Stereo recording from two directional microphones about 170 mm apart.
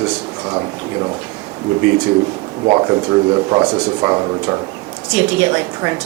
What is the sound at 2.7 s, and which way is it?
A woman's voice, 25° right (ahead or behind).